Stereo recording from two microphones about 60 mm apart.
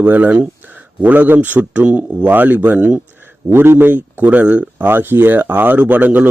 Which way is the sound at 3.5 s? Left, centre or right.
Right.